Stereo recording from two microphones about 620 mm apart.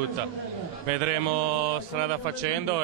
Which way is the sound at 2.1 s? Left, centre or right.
Right.